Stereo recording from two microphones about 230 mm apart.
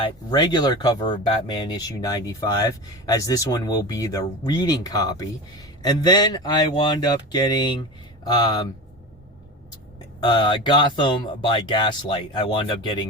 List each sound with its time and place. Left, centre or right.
0.0 s speech: centre
10.2 s speech: centre